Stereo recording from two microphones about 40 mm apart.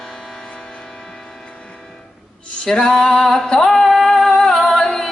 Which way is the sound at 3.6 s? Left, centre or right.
Centre.